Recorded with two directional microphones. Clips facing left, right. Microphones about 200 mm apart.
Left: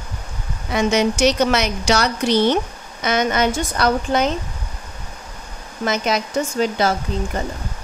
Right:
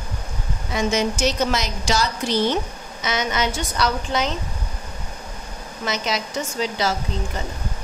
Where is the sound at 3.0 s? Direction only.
55° left (ahead or behind).